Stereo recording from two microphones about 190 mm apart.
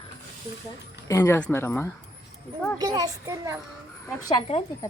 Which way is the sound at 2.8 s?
20° right (ahead or behind).